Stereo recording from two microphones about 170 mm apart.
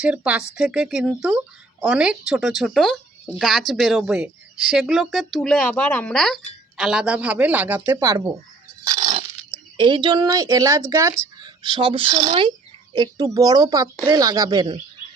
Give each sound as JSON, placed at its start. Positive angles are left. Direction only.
{"t": 0.0, "sound": "a woman's voice", "side_deg": -5}
{"t": 9.7, "sound": "speech", "side_deg": -30}